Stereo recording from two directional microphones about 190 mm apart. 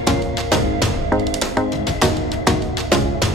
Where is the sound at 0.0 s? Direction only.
Centre (ahead or behind).